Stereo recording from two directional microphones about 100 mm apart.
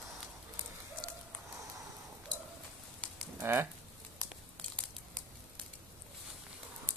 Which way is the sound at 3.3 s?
25° right (ahead or behind).